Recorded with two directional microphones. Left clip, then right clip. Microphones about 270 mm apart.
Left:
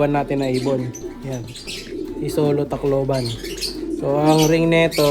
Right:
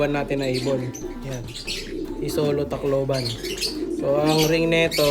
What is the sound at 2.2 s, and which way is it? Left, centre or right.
Speech, centre.